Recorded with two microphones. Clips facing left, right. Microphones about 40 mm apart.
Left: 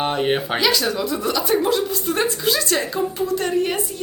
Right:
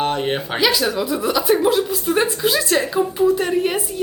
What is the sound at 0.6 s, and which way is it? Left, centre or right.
A woman's voice, centre.